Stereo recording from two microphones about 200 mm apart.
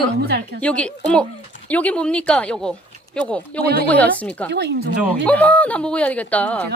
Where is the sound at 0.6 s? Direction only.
5° left (ahead or behind).